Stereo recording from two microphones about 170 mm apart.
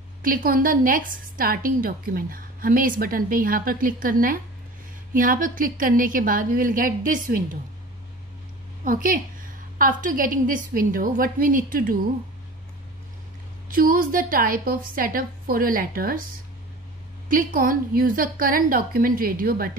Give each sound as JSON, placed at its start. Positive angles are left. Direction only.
{"t": 0.2, "sound": "a woman's voice", "side_deg": -55}
{"t": 8.8, "sound": "a woman's voice", "side_deg": -55}
{"t": 13.7, "sound": "a woman's voice", "side_deg": -55}
{"t": 17.3, "sound": "a woman's voice", "side_deg": -55}